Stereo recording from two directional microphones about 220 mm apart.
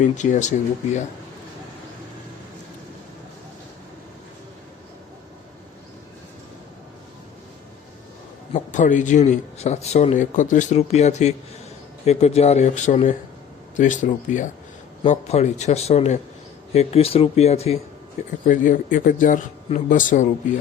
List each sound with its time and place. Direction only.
0.0 s speech: 35° left (ahead or behind)
8.5 s speech: 35° left (ahead or behind)